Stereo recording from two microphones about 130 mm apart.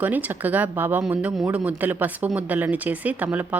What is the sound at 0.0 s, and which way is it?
Speech, 15° right (ahead or behind).